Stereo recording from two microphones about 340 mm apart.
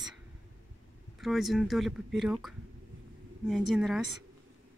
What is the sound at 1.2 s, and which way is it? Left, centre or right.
Speech, centre.